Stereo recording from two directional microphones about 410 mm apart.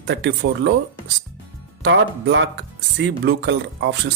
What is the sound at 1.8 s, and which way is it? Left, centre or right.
Speech, right.